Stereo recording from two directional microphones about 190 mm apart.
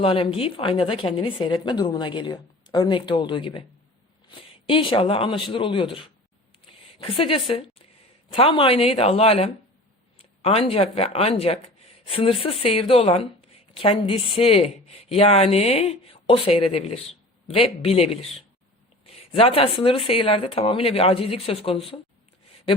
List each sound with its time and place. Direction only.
0.0 s a woman's voice: 30° left (ahead or behind)